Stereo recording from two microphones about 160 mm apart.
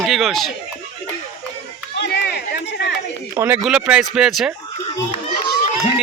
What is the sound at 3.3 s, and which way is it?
Speech, 10° right (ahead or behind).